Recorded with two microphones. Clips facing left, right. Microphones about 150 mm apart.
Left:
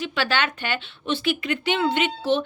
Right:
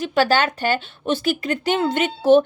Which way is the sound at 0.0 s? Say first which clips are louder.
Right 7 dB; 40° right (ahead or behind).